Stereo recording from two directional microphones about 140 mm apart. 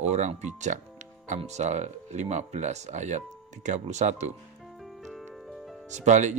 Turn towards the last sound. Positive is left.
turn(degrees=-60)  # may be behind; listen again after turning